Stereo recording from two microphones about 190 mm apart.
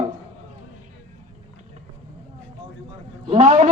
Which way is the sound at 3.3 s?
35° right (ahead or behind).